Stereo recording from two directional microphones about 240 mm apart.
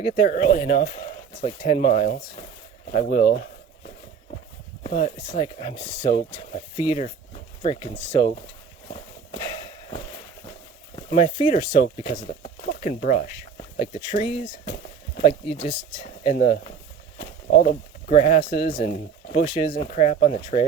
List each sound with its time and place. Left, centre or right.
0.0 s speech: left
4.8 s speech: left
8.9 s walk: left
11.1 s speech: left
16.3 s speech: left